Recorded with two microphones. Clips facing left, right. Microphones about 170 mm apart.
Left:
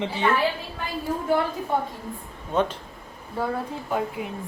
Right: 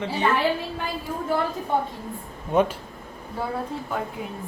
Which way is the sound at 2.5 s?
10° right (ahead or behind).